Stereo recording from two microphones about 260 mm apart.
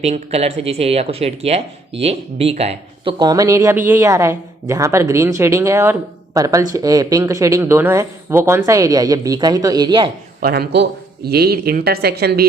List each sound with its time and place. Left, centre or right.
0.0 s speech: right
10.4 s speech: right